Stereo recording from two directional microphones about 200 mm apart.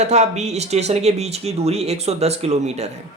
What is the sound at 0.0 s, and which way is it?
A man's voice, 35° right (ahead or behind).